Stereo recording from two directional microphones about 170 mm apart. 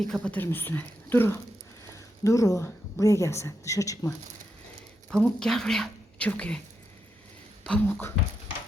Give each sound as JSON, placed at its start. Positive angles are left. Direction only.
{"t": 0.0, "sound": "a woman's voice", "side_deg": 5}
{"t": 5.1, "sound": "speech", "side_deg": 0}
{"t": 7.6, "sound": "a woman's voice", "side_deg": 10}